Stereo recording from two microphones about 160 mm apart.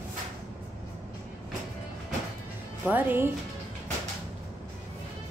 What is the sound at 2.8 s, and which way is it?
Speech, 10° right (ahead or behind).